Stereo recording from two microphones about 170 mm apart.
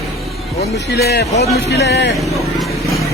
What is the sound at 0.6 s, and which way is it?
A man's voice, 75° left (ahead or behind).